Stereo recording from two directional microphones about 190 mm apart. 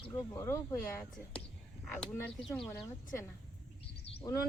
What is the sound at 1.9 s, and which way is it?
Speech, 5° left (ahead or behind).